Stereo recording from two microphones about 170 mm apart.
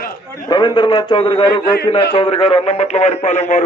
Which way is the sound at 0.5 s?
25° left (ahead or behind).